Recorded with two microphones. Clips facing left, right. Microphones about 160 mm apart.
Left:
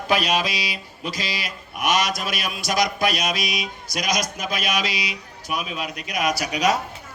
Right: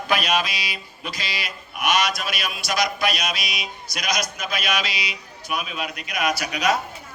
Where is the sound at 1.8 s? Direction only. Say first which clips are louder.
Even; 40° left (ahead or behind).